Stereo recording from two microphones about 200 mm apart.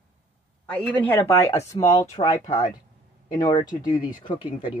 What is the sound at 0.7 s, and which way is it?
Speech, 10° left (ahead or behind).